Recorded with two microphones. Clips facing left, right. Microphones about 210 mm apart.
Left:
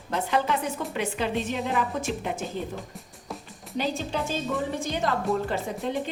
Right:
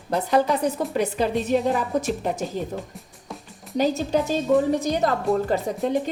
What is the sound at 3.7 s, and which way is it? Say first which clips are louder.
A woman's voice: right 7 dB; 40° right (ahead or behind).